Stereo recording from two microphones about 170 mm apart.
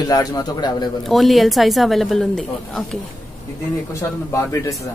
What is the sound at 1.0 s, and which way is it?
A woman's voice, centre (ahead or behind).